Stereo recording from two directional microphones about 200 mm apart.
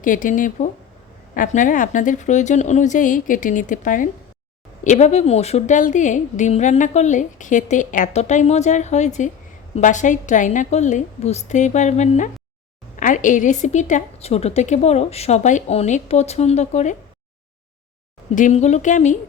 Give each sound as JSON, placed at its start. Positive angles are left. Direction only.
{"t": 0.0, "sound": "a woman's voice", "side_deg": 40}
{"t": 18.3, "sound": "a woman's voice", "side_deg": 35}